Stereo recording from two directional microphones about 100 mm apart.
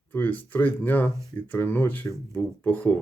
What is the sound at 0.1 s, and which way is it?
Speech, 20° left (ahead or behind).